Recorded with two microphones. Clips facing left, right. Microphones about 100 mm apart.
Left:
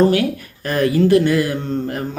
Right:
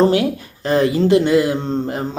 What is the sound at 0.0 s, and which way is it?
Speech, 25° right (ahead or behind).